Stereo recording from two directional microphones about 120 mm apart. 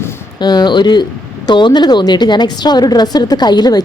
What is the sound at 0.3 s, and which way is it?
Speech, 35° left (ahead or behind).